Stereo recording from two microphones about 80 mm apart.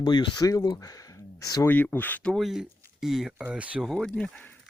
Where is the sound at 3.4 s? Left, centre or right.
Centre.